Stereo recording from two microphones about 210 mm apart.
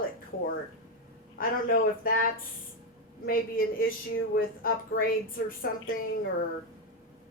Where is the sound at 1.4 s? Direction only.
40° left (ahead or behind).